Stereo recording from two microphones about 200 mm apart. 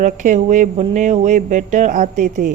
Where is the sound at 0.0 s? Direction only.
40° right (ahead or behind).